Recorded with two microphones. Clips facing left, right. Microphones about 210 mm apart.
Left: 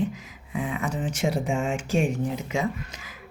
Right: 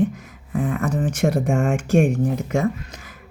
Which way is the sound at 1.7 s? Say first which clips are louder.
Right 7 dB; 65° right (ahead or behind).